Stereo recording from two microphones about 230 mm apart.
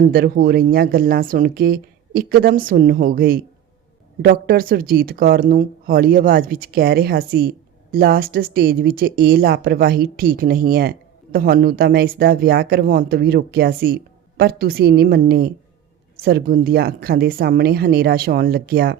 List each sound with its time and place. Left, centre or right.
0.1 s a woman's voice: right